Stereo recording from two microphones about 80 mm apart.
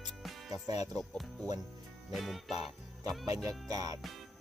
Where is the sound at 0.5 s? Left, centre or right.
Right.